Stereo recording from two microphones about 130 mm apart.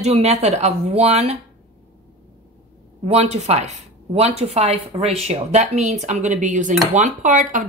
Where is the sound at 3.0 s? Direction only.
55° right (ahead or behind).